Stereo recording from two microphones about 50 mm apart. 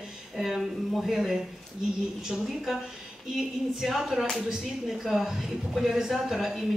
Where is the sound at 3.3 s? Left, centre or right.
Centre.